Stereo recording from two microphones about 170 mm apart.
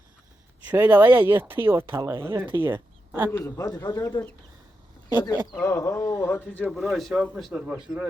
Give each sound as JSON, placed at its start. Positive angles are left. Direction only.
{"t": 0.7, "sound": "a woman's voice", "side_deg": -10}
{"t": 3.3, "sound": "a man's voice", "side_deg": 20}